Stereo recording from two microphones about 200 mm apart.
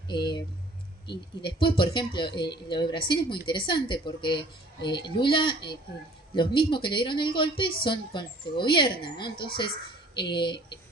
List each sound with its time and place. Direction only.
0.1 s a woman's voice: 25° left (ahead or behind)
1.6 s a woman's voice: 25° left (ahead or behind)